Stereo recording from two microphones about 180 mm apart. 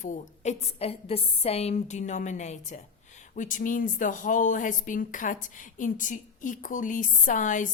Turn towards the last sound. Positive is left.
turn(degrees=45)  # may be behind; listen again after turning